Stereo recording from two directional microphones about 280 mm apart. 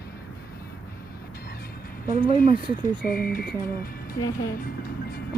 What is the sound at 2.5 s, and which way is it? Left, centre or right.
Speech, centre.